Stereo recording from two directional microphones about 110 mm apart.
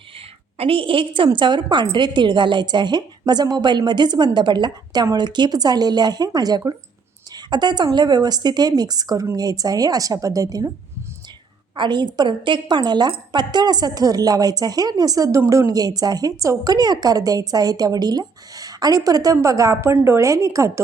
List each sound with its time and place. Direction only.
0.6 s a woman's voice: 55° right (ahead or behind); by 10.7 s 30° right (ahead or behind)
11.8 s a woman's voice: 45° right (ahead or behind); by 20.8 s 25° right (ahead or behind)